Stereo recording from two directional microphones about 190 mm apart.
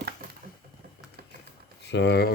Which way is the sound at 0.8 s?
50° right (ahead or behind).